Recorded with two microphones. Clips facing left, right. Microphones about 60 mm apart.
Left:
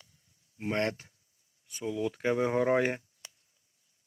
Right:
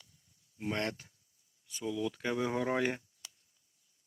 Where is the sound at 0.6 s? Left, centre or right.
Left.